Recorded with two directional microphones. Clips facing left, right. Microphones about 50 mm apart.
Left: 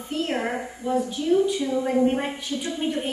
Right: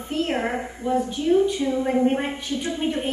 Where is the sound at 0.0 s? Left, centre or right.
Right.